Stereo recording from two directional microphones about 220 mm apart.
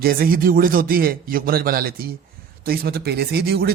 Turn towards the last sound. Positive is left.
turn(degrees=-45)  # may be behind; listen again after turning